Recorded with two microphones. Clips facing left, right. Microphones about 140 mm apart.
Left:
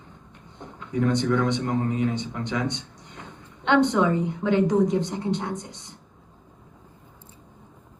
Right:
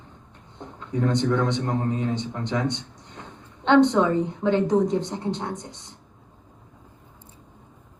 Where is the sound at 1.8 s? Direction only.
10° left (ahead or behind).